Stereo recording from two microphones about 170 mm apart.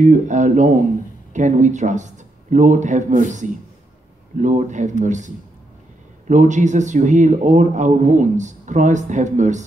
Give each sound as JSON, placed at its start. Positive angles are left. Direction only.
{"t": 0.0, "sound": "a man's voice", "side_deg": -45}